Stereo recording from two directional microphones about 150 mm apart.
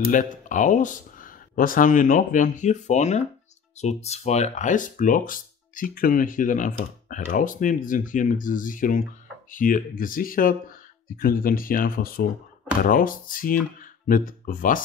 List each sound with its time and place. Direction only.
0.1 s speech: 60° left (ahead or behind)